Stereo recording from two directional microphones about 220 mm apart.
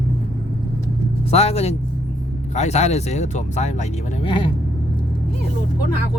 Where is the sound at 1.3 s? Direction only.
30° left (ahead or behind).